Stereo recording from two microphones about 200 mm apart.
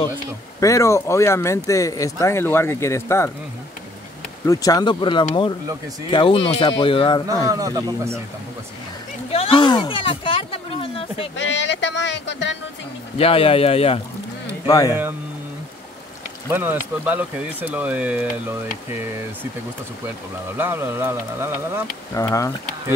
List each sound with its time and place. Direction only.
0.6 s speech: 15° left (ahead or behind)
4.5 s speech: 15° left (ahead or behind)
7.4 s speech: 15° right (ahead or behind)
9.3 s a sound: 25° left (ahead or behind)
11.3 s speech: 65° left (ahead or behind)
13.2 s speech: 30° left (ahead or behind)
14.7 s speech: 20° left (ahead or behind)
16.4 s speech: 10° right (ahead or behind)
20.5 s speech: 10° right (ahead or behind)
22.1 s speech: 15° left (ahead or behind)